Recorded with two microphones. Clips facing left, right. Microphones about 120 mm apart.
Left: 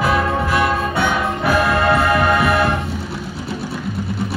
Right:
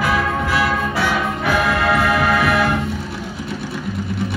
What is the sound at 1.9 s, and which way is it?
Music, 25° left (ahead or behind).